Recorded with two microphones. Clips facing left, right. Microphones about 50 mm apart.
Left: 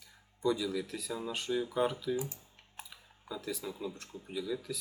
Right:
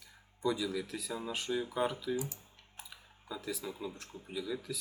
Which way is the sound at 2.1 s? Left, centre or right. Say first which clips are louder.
Left 1 dB; left.